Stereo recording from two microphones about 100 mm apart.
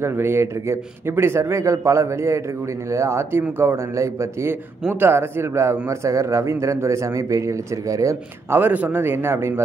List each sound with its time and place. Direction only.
0.0 s a man's voice: 25° right (ahead or behind)
8.5 s a man's voice: 20° right (ahead or behind)